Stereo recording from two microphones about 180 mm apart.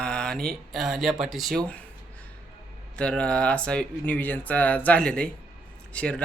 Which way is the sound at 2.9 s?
5° left (ahead or behind).